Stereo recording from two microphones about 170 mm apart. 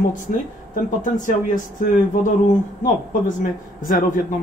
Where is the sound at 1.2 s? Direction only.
50° left (ahead or behind).